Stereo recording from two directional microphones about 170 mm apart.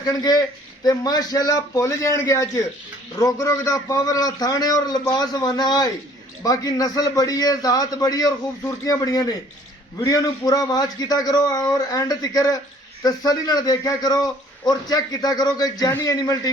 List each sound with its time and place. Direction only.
0.0 s a man's voice: 20° left (ahead or behind)